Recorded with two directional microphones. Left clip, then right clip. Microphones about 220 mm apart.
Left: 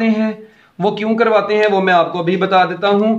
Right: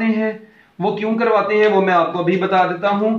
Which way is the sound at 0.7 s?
45° left (ahead or behind).